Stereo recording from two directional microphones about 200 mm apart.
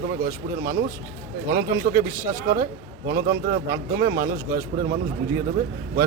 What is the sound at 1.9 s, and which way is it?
A man's voice, 45° right (ahead or behind).